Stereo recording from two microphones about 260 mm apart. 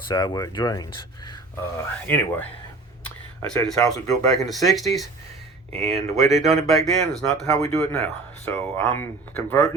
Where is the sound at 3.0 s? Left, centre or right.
Centre.